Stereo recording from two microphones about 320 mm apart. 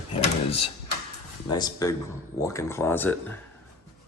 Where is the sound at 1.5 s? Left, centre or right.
Centre.